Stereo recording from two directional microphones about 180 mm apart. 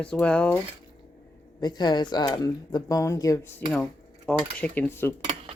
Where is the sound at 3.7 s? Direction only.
5° left (ahead or behind).